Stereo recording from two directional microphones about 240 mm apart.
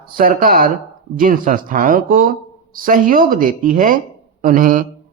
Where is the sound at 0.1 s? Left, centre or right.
Right.